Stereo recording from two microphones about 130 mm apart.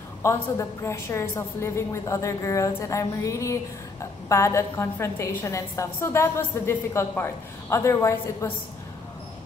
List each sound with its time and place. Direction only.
0.2 s a woman's voice: 20° left (ahead or behind)